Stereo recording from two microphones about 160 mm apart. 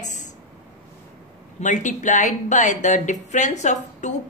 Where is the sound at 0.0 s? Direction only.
50° left (ahead or behind).